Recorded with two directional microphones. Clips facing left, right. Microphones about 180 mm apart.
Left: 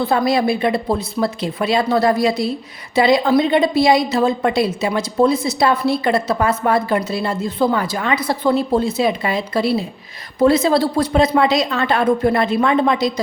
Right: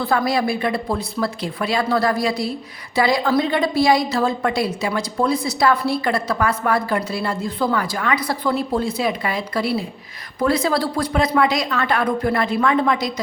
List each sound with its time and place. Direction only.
0.0 s a woman's voice: 20° left (ahead or behind)